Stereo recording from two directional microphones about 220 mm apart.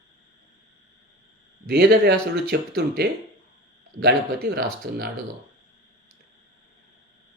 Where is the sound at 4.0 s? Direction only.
45° right (ahead or behind).